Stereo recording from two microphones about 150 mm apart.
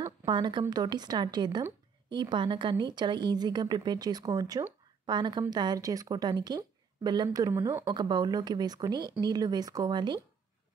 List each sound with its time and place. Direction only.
0.0 s a woman's voice: 30° right (ahead or behind)